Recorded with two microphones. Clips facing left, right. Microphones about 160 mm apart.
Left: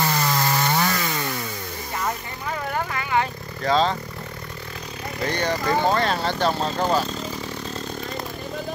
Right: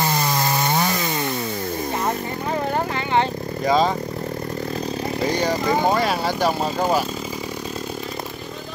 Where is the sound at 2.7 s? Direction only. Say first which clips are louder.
Right 1 dB; 30° right (ahead or behind).